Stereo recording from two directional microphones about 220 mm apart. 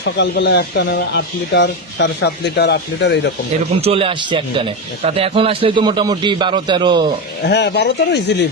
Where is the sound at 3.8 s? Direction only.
25° right (ahead or behind).